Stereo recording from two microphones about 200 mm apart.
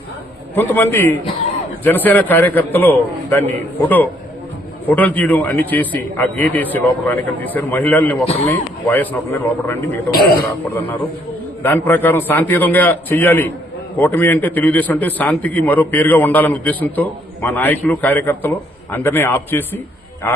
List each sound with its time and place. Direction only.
0.5 s a man's voice: 10° left (ahead or behind)
10.1 s speech: 50° left (ahead or behind)
10.8 s a man's voice: 10° left (ahead or behind)